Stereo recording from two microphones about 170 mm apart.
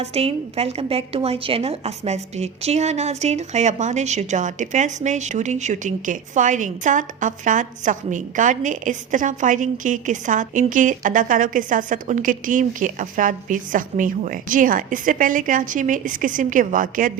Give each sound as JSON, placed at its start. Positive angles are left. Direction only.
{"t": 0.0, "sound": "a woman's voice", "side_deg": -35}